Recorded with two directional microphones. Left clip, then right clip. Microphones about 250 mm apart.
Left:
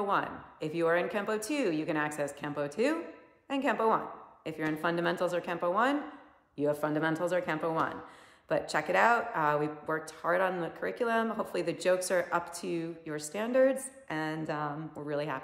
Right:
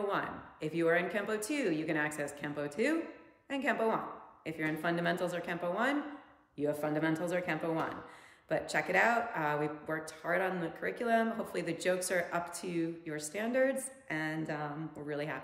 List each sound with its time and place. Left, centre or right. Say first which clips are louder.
0.1 s speech: left 5 dB; centre